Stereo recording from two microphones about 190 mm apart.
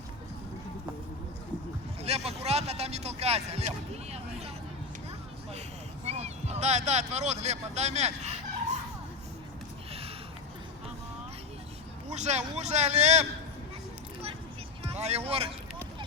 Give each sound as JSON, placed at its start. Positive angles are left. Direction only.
{"t": 2.0, "sound": "a sound", "side_deg": -35}
{"t": 6.1, "sound": "speech", "side_deg": -35}
{"t": 12.0, "sound": "speech", "side_deg": -35}
{"t": 14.8, "sound": "speech", "side_deg": -35}